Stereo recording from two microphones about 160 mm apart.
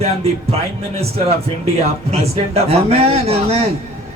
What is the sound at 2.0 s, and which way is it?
A man's voice, 40° right (ahead or behind).